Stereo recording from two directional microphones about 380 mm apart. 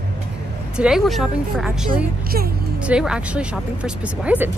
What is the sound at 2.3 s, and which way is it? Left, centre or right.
Speech, right.